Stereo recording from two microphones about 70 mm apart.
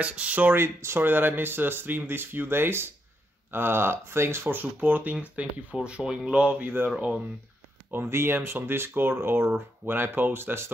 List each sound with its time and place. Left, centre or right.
0.0 s speech: centre
0.7 s speech: right; by 6.7 s centre
7.9 s speech: right